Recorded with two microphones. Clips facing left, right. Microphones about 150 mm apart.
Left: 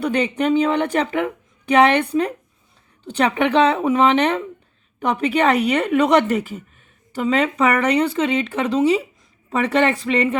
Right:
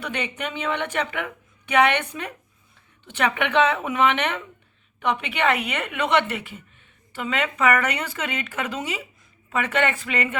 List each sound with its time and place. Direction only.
0.0 s a woman's voice: 35° left (ahead or behind)